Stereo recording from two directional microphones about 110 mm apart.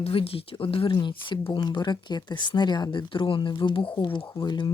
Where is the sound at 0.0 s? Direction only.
60° left (ahead or behind).